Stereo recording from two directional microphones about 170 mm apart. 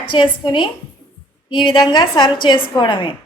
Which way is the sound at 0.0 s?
30° left (ahead or behind).